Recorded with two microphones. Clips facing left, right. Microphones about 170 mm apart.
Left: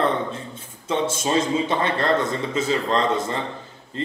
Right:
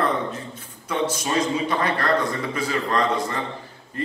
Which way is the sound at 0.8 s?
25° left (ahead or behind).